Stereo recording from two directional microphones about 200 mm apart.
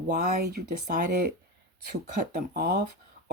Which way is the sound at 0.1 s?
45° right (ahead or behind).